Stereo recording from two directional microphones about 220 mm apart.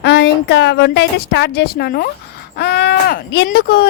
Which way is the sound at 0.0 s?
50° left (ahead or behind).